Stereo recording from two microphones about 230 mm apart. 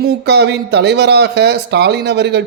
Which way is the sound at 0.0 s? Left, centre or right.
Right.